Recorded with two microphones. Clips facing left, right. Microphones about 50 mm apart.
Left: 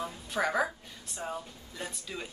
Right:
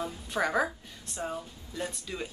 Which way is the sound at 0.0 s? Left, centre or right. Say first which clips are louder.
Right 1 dB; centre.